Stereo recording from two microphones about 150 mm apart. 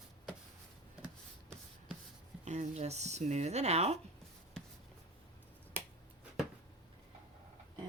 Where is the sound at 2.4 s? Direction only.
50° right (ahead or behind).